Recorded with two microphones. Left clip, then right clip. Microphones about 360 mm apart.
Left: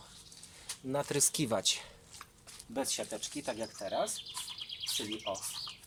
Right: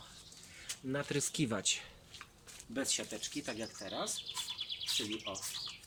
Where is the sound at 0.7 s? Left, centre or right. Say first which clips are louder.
Left 3 dB; centre.